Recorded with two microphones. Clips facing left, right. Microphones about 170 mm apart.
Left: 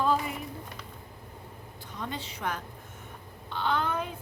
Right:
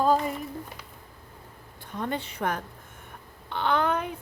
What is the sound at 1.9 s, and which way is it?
A woman's voice, 55° right (ahead or behind).